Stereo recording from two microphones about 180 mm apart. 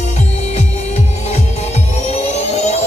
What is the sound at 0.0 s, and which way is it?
Music, 40° left (ahead or behind).